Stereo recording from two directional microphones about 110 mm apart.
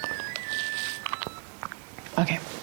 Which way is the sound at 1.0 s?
20° right (ahead or behind).